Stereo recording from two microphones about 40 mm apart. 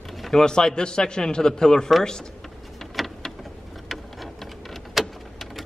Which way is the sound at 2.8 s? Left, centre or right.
Centre.